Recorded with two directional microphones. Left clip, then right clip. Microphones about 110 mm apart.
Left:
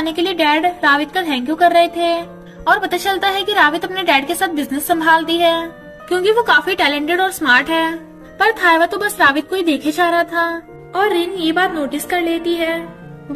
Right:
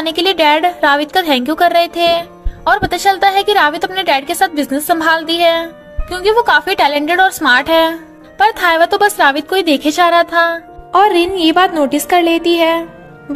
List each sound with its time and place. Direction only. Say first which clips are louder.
0.0 s a woman's voice: right 4 dB; 80° right